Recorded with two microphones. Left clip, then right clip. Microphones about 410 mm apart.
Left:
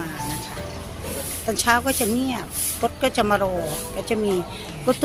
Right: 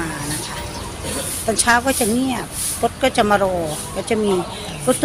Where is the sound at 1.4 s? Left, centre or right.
Left.